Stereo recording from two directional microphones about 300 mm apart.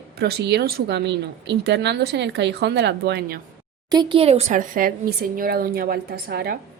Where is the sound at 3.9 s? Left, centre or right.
Centre.